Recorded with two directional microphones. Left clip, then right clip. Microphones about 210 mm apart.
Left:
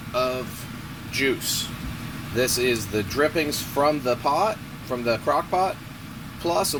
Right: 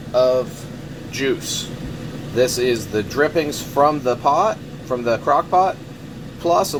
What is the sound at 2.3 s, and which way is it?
Speech, 20° left (ahead or behind).